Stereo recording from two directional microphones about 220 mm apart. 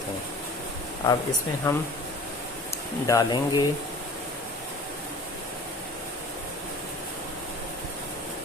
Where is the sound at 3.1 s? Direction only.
20° left (ahead or behind).